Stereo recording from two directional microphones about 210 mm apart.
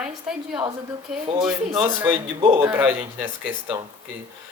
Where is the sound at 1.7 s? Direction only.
20° right (ahead or behind).